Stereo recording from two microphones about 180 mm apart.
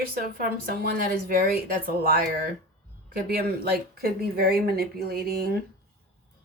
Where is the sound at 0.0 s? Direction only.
55° right (ahead or behind).